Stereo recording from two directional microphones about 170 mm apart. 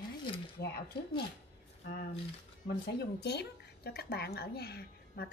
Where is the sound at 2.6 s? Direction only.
75° left (ahead or behind).